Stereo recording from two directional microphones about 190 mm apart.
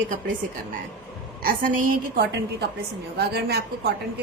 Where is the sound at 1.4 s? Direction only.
45° right (ahead or behind).